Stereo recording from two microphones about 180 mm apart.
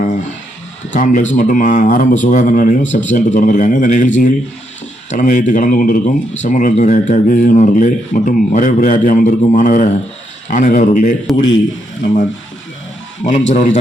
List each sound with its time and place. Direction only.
0.0 s guitar: 45° left (ahead or behind)
0.9 s speech: 45° left (ahead or behind)
13.5 s a man's voice: 40° left (ahead or behind)